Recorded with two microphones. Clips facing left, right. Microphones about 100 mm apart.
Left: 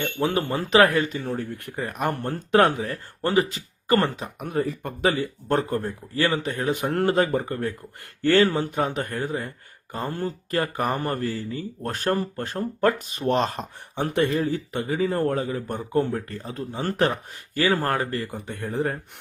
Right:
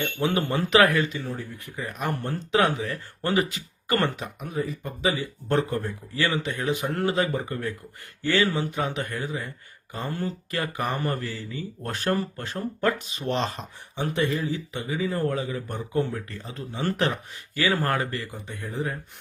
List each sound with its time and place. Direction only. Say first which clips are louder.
0.0 s speech: left 1 dB; 35° left (ahead or behind)
4.4 s speech: left 8 dB; 65° left (ahead or behind); by 18.3 s 40° left (ahead or behind)
18.3 s speech: left 5 dB; 55° left (ahead or behind)